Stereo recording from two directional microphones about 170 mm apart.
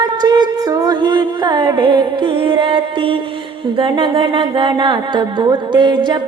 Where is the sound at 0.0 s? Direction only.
25° right (ahead or behind).